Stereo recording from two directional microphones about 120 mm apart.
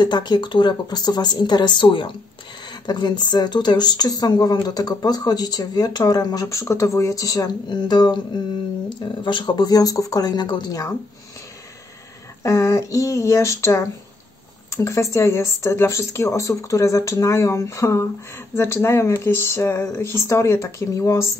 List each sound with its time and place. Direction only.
0.0 s speech: 35° left (ahead or behind)
12.4 s speech: 25° left (ahead or behind)